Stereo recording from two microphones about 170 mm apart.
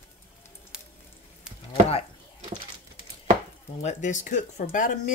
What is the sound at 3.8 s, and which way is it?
Speech, 45° left (ahead or behind).